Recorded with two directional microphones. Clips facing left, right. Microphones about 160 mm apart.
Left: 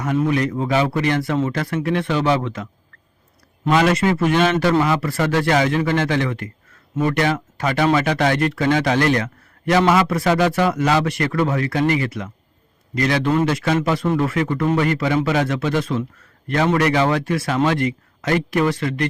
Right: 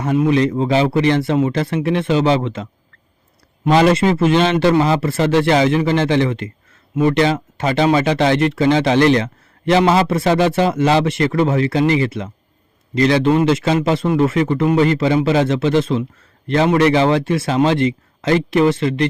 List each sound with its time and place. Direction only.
0.3 s speech: 25° right (ahead or behind)
3.7 s a man's voice: 30° right (ahead or behind)